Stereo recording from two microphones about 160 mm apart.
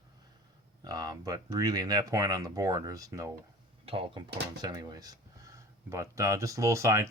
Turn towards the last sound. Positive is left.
turn(degrees=-20)  # may be behind; listen again after turning